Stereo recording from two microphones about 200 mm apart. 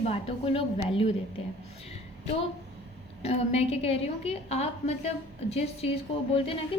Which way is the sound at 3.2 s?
30° left (ahead or behind).